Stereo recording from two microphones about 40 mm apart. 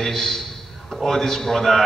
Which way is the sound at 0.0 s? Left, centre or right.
Centre.